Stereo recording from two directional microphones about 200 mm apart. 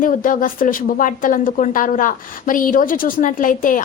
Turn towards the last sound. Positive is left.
turn(degrees=40)  # may be behind; listen again after turning